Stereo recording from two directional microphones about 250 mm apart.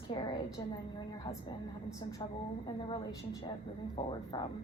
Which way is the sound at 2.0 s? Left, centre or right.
Centre.